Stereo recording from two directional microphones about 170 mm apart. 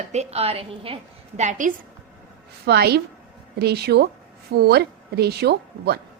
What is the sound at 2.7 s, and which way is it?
Speech, 70° right (ahead or behind).